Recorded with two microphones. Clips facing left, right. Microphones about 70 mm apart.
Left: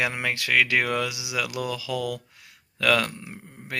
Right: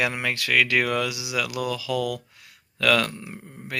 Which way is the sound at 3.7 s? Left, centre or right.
Left.